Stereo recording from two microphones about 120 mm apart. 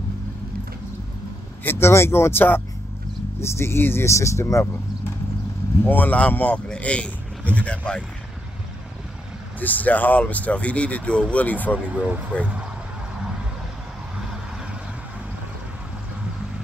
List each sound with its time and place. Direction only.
1.6 s speech: 20° left (ahead or behind)
5.9 s speech: 15° left (ahead or behind)
9.6 s speech: 15° left (ahead or behind)
11.9 s speech: 15° right (ahead or behind)